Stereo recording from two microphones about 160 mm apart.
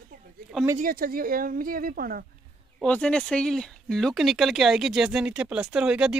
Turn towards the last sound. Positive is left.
turn(degrees=-5)  # may be behind; listen again after turning